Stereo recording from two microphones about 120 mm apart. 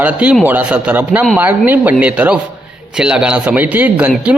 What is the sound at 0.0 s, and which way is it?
A man's voice, 10° right (ahead or behind).